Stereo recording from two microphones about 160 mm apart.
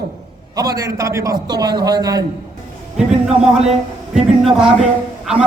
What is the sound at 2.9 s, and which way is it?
A man's voice, 5° right (ahead or behind).